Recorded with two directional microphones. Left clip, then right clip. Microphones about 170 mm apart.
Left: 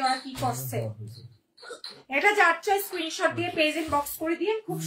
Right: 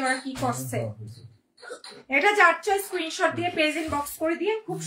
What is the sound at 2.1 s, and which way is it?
A woman's voice, 20° right (ahead or behind).